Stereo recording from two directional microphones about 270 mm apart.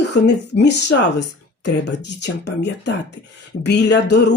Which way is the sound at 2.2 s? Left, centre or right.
Left.